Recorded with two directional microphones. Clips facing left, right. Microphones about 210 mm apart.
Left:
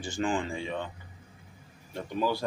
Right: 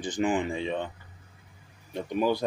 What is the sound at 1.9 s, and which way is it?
Speech, 20° right (ahead or behind).